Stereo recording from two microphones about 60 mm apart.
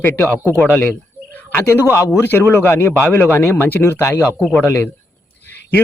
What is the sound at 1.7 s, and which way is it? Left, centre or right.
Speech, left.